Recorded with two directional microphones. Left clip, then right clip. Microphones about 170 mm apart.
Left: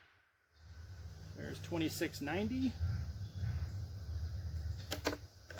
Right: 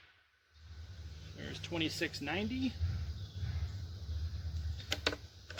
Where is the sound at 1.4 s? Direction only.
10° right (ahead or behind).